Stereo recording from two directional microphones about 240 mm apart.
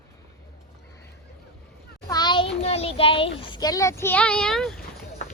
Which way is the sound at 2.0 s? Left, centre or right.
Centre.